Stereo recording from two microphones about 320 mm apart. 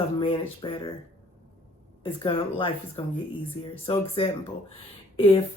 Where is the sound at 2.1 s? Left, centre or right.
Centre.